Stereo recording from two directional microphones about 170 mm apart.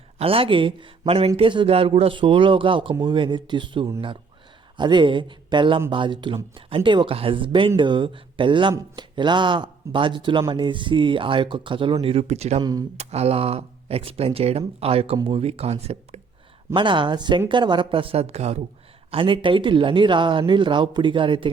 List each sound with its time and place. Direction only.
0.2 s speech: 35° right (ahead or behind)